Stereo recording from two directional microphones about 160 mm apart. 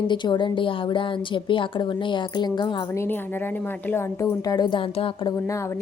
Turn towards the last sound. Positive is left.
turn(degrees=35)  # may be behind; listen again after turning